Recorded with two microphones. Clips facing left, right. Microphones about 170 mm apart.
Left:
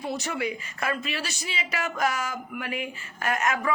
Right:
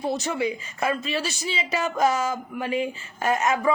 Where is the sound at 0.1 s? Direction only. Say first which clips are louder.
Right 3 dB; 25° right (ahead or behind).